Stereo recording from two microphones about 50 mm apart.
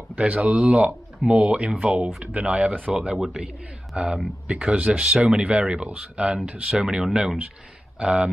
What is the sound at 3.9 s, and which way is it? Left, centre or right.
Speech, right.